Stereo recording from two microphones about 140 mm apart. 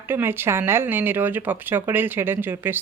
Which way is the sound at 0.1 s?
15° right (ahead or behind).